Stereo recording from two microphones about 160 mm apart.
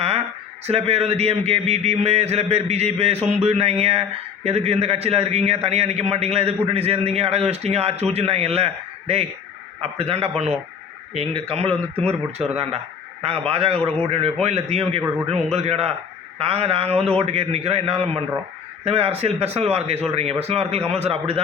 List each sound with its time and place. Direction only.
0.7 s a man's voice: 40° right (ahead or behind)